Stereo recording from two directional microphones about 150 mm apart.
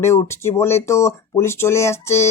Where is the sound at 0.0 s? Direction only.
15° left (ahead or behind).